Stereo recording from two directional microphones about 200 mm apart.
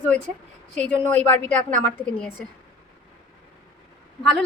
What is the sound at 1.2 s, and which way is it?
Speech, 35° right (ahead or behind).